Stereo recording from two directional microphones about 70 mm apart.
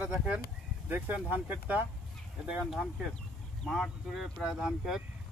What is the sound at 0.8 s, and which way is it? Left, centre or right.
Speech, right.